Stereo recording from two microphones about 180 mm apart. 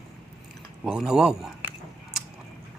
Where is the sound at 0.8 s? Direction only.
5° right (ahead or behind).